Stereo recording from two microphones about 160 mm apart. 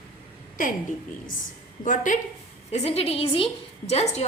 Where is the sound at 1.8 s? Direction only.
55° left (ahead or behind).